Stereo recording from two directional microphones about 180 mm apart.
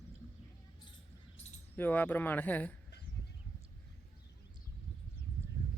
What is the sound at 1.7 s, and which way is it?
Speech, 10° left (ahead or behind).